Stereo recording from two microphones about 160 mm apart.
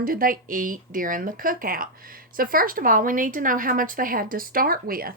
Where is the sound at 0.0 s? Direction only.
60° right (ahead or behind).